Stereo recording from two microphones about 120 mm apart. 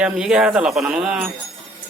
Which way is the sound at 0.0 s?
10° right (ahead or behind).